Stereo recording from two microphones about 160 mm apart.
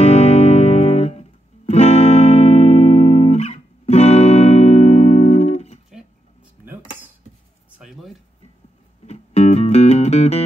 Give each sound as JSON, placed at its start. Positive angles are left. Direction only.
{"t": 0.0, "sound": "music", "side_deg": 45}
{"t": 7.8, "sound": "a sound", "side_deg": 0}
{"t": 9.0, "sound": "music", "side_deg": 40}